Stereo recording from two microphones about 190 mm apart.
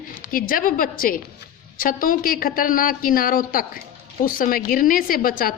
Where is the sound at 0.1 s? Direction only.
45° left (ahead or behind).